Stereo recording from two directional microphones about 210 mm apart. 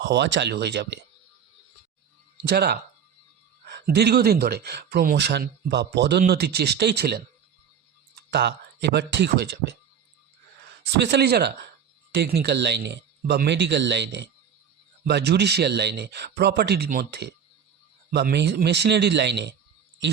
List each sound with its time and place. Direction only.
0.0 s speech: 55° right (ahead or behind)
2.4 s speech: 50° right (ahead or behind)
8.3 s speech: 50° right (ahead or behind)
11.0 s speech: 50° right (ahead or behind)